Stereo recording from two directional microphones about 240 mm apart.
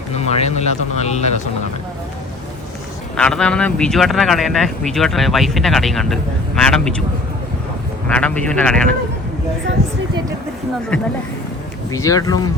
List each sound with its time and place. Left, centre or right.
0.1 s speech: left
3.2 s speech: centre
8.0 s speech: centre
10.9 s speech: centre